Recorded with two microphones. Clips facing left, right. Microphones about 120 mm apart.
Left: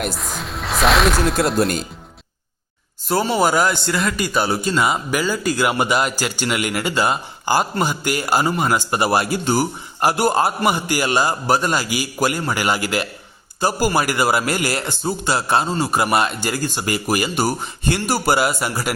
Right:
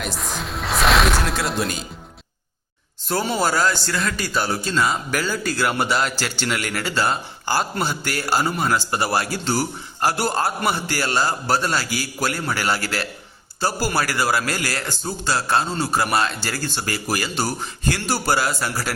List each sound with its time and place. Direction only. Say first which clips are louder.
0.2 s music: even; centre (ahead or behind)
3.1 s a man's voice: left 4 dB; 5° left (ahead or behind)